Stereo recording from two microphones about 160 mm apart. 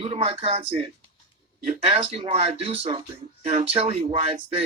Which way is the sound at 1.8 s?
40° right (ahead or behind).